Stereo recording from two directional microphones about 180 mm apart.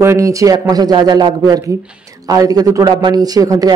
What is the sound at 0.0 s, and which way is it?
Speech, 15° right (ahead or behind).